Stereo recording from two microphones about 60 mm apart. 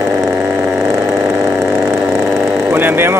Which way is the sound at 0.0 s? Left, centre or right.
Right.